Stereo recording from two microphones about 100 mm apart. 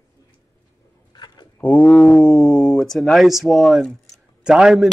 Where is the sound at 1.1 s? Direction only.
45° left (ahead or behind).